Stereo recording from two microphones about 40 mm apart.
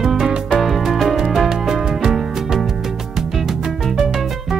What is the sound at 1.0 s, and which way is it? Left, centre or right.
Music, centre.